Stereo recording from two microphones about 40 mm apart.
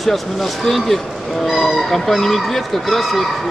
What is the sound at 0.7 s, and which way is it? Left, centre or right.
Speech, centre.